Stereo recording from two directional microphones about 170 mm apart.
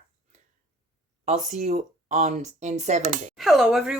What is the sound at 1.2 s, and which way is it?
Speech, 45° right (ahead or behind).